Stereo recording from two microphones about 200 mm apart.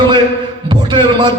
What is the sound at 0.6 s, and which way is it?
Heart sounds, 25° right (ahead or behind).